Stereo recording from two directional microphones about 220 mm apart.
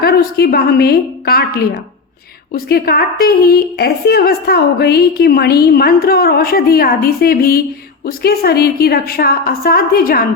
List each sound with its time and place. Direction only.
0.0 s a woman's voice: 45° left (ahead or behind)